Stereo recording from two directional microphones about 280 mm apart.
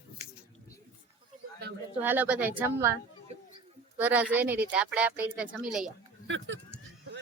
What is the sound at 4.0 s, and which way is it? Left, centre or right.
Speech, centre.